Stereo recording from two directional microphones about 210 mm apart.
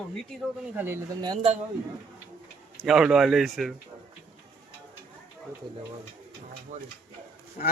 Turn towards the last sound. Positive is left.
turn(degrees=40)  # may be behind; listen again after turning